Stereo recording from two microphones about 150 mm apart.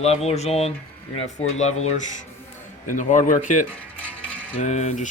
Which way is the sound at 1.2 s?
50° left (ahead or behind).